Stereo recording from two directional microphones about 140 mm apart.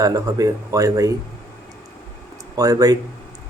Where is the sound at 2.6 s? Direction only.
25° right (ahead or behind).